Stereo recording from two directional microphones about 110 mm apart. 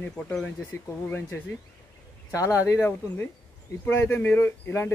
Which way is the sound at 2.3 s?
30° left (ahead or behind).